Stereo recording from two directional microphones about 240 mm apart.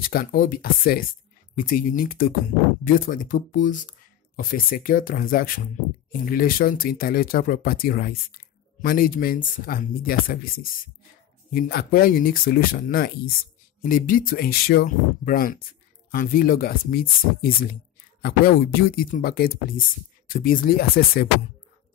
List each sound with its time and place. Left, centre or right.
0.0 s speech: left